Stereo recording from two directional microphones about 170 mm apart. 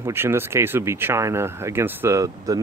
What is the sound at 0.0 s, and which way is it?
Speech, 15° right (ahead or behind).